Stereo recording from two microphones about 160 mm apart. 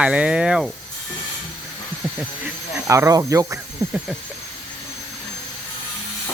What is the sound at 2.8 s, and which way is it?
Speech, 20° right (ahead or behind).